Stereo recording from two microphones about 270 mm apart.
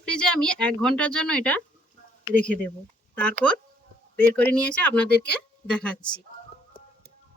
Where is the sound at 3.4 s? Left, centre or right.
Centre.